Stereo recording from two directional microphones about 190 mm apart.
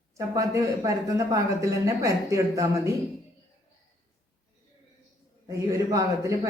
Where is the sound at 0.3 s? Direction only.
15° right (ahead or behind).